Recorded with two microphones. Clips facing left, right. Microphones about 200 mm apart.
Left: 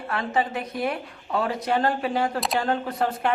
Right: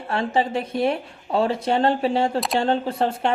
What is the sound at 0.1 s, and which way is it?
Speech, 30° right (ahead or behind).